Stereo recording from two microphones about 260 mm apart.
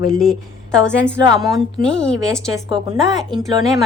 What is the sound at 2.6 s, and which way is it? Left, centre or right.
Speech, centre.